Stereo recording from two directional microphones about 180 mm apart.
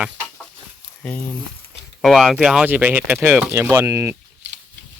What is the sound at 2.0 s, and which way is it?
Speech, centre (ahead or behind).